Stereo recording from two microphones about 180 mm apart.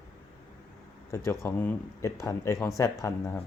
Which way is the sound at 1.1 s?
15° left (ahead or behind).